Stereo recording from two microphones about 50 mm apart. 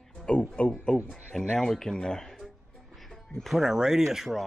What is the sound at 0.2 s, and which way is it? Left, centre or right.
Music, centre.